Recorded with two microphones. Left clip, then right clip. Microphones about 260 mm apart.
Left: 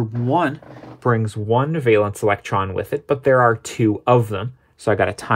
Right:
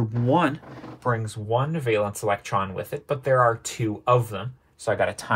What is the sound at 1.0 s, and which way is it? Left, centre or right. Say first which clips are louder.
Speech: left 7 dB; left.